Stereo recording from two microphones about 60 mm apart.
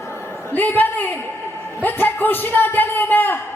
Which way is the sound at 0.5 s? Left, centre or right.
Left.